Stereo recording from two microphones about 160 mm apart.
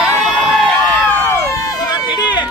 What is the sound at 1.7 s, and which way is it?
Run, 25° left (ahead or behind).